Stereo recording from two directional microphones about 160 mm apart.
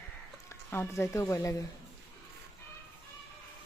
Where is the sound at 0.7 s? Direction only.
15° left (ahead or behind).